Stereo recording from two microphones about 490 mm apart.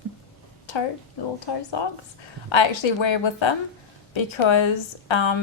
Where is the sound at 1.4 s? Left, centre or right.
Left.